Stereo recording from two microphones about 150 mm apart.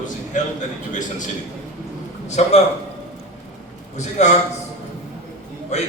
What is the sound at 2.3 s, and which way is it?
Speech, 50° left (ahead or behind).